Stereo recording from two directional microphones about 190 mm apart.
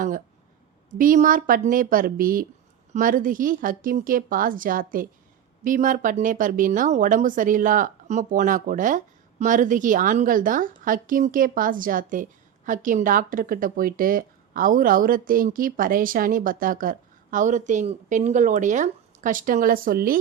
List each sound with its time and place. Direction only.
0.9 s a woman's voice: 45° right (ahead or behind)